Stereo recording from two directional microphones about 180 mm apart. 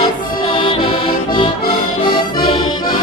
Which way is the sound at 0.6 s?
30° left (ahead or behind).